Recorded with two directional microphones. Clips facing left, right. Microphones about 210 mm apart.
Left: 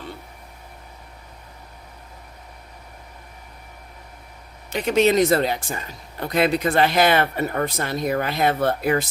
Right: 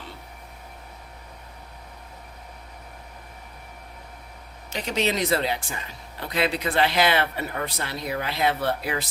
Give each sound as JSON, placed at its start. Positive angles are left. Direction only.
{"t": 4.7, "sound": "speech", "side_deg": 50}